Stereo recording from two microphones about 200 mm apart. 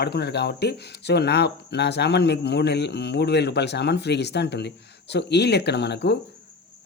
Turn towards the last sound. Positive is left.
turn(degrees=60)  # may be behind; listen again after turning